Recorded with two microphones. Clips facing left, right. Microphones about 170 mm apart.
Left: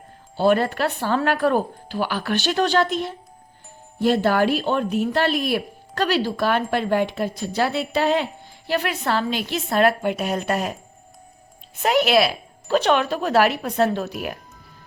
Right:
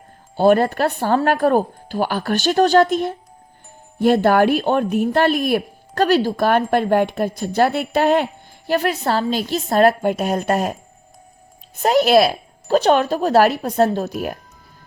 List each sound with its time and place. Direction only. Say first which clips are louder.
0.3 s speech: right 4 dB; 45° right (ahead or behind)
11.8 s speech: right 4 dB; 40° right (ahead or behind)